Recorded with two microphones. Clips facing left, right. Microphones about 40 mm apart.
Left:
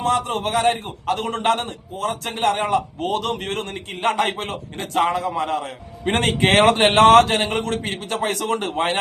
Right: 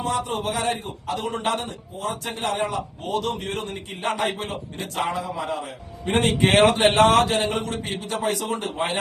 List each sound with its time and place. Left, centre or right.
0.0 s a man's voice: left